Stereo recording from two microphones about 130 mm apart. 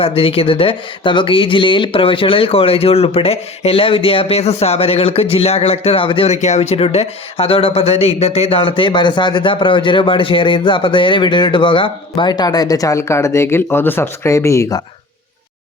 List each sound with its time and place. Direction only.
0.0 s speech: 45° left (ahead or behind); by 14.8 s 20° left (ahead or behind)